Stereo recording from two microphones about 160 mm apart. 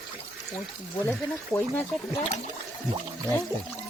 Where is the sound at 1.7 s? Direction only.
10° left (ahead or behind).